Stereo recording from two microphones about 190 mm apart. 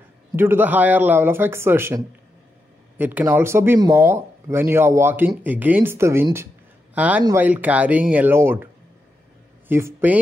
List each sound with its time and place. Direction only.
0.4 s speech: 10° right (ahead or behind)
9.7 s speech: 15° right (ahead or behind)